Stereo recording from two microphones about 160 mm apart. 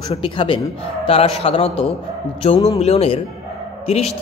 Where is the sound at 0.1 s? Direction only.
30° left (ahead or behind).